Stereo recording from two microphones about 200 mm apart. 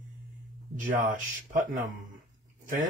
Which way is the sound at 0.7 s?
40° right (ahead or behind).